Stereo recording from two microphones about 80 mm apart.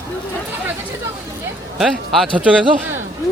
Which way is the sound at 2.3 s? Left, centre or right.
Centre.